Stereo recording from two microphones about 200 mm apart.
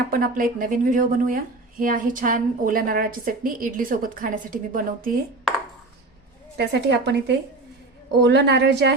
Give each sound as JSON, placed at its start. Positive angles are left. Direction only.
{"t": 0.1, "sound": "a woman's voice", "side_deg": -45}
{"t": 6.6, "sound": "a woman's voice", "side_deg": -55}
{"t": 8.2, "sound": "a woman's voice", "side_deg": -60}